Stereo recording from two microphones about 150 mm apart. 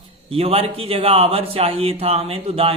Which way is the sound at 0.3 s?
40° right (ahead or behind).